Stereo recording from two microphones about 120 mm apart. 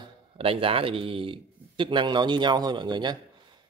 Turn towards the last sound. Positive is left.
turn(degrees=-40)  # may be behind; listen again after turning